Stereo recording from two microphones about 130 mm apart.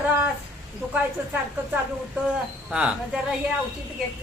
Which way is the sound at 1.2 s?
15° right (ahead or behind).